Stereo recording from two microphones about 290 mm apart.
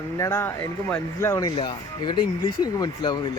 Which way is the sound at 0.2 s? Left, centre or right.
Centre.